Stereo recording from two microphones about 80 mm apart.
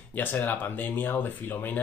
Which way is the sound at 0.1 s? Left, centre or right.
Left.